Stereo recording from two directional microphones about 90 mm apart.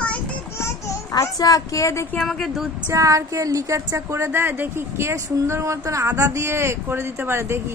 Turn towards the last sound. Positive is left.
turn(degrees=-30)  # may be behind; listen again after turning